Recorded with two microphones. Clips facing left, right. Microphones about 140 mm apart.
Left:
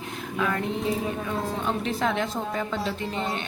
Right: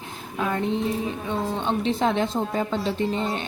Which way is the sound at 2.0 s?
30° right (ahead or behind).